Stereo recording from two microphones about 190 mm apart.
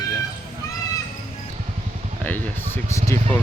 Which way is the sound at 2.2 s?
10° left (ahead or behind).